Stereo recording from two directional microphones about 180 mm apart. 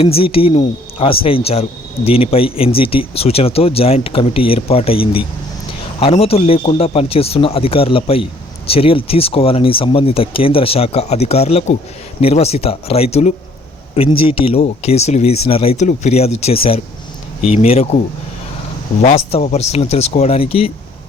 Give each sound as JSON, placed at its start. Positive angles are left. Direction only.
{"t": 0.0, "sound": "speech", "side_deg": 30}
{"t": 19.3, "sound": "speech", "side_deg": 35}